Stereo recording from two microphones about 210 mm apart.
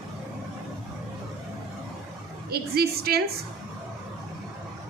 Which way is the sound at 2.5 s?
50° right (ahead or behind).